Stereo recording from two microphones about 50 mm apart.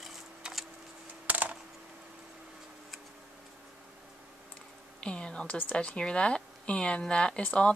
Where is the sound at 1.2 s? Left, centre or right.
Right.